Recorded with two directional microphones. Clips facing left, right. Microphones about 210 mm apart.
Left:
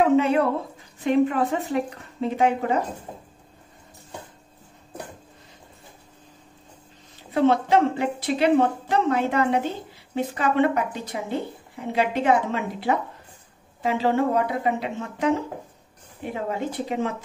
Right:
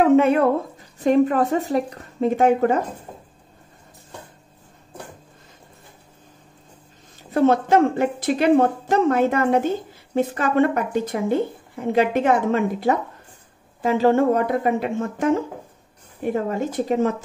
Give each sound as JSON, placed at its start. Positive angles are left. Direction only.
{"t": 0.1, "sound": "speech", "side_deg": -55}
{"t": 0.9, "sound": "a woman's voice", "side_deg": -40}
{"t": 7.3, "sound": "a woman's voice", "side_deg": -45}